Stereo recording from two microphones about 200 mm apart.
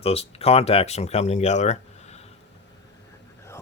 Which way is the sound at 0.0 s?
30° left (ahead or behind).